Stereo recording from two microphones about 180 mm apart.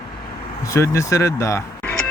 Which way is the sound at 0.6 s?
15° left (ahead or behind).